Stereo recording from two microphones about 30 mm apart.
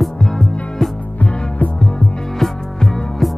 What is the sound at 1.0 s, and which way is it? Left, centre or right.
Music, left.